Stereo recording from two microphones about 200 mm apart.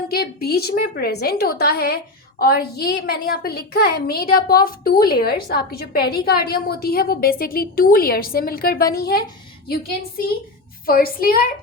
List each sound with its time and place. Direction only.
0.1 s a woman's voice: 50° left (ahead or behind)